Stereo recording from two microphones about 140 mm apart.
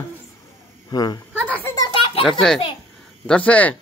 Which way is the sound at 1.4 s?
10° left (ahead or behind).